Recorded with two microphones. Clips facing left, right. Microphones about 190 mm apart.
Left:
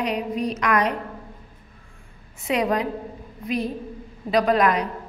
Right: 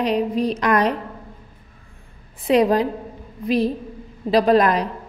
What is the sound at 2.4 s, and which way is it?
A woman's voice, 35° right (ahead or behind).